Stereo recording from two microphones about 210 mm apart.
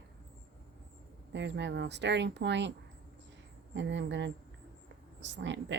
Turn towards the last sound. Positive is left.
turn(degrees=-60)  # may be behind; listen again after turning